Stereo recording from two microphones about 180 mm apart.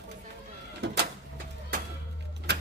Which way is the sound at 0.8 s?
70° right (ahead or behind).